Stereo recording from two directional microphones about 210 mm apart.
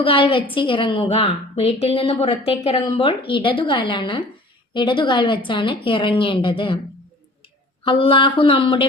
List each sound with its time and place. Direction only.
0.0 s a woman's voice: 25° left (ahead or behind)
7.9 s a woman's voice: 25° left (ahead or behind)